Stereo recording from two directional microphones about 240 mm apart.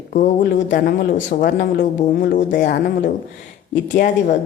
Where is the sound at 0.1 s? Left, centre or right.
Left.